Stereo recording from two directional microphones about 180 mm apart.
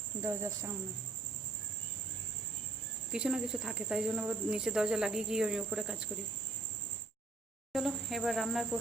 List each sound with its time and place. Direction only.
0.2 s speech: 15° right (ahead or behind)
3.1 s speech: 5° right (ahead or behind)
7.7 s speech: centre (ahead or behind)